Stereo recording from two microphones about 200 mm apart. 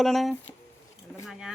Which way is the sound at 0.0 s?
Centre (ahead or behind).